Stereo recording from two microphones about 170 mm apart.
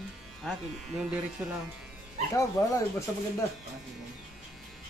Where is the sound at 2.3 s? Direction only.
15° left (ahead or behind).